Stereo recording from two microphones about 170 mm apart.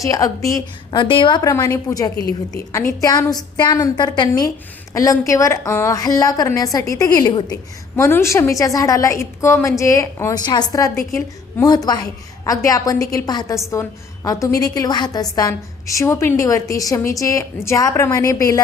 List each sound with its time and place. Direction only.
0.0 s a woman's voice: 20° left (ahead or behind)
0.9 s a woman's voice: 30° left (ahead or behind)